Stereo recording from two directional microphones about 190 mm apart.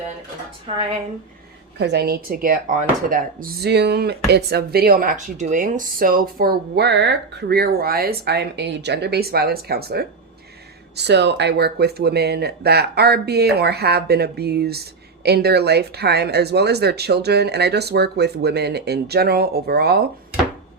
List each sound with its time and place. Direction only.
0.7 s a woman's voice: 30° right (ahead or behind)
1.8 s speech: 60° right (ahead or behind)